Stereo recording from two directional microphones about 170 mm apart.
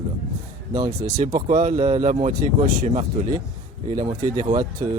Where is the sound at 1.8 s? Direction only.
30° right (ahead or behind).